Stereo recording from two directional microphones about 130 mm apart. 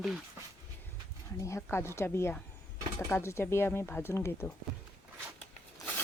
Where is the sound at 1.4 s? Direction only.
20° left (ahead or behind).